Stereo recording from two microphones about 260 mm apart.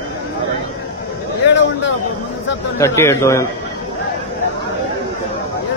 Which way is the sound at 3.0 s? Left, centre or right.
Centre.